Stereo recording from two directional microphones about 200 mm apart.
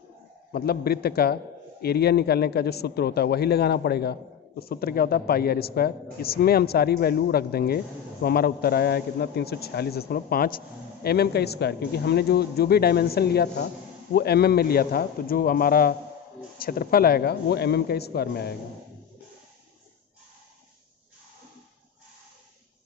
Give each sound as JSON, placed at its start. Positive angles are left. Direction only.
{"t": 0.5, "sound": "a man's voice", "side_deg": 50}